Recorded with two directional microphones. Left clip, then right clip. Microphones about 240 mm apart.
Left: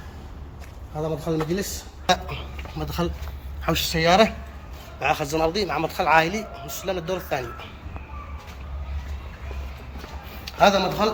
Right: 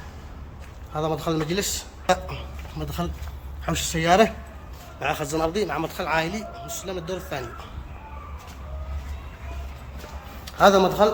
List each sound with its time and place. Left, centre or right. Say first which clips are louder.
0.9 s a man's voice: right 1 dB; centre
10.4 s a man's voice: right 2 dB; right